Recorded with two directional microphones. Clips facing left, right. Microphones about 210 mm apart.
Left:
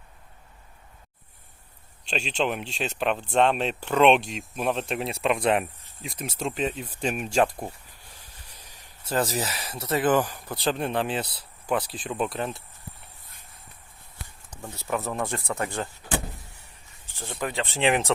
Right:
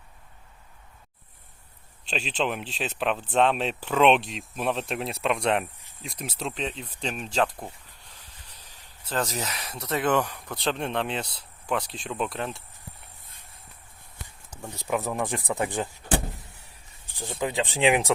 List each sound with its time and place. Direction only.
2.0 s speech: centre (ahead or behind)
14.5 s speech: 15° right (ahead or behind)
17.4 s speech: 15° right (ahead or behind)